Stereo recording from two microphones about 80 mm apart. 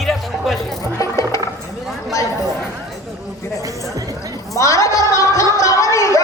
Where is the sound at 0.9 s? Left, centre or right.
Left.